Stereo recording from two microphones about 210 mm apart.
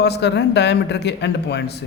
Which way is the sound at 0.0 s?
55° left (ahead or behind).